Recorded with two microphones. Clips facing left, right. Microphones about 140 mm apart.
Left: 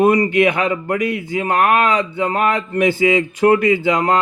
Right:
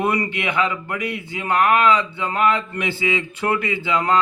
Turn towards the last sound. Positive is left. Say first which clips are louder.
# left 5 dB
turn(degrees=45)  # may be behind; listen again after turning